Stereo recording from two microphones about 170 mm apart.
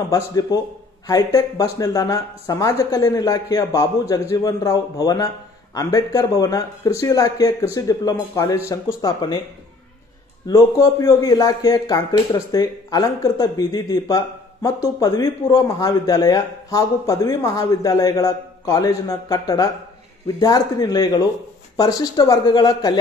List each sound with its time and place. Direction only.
0.1 s speech: 20° left (ahead or behind)
10.4 s speech: 20° left (ahead or behind)